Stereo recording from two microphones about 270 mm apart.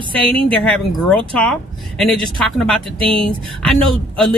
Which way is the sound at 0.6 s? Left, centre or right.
Centre.